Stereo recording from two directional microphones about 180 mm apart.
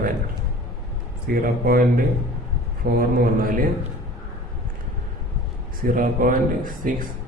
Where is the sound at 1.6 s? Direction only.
55° right (ahead or behind).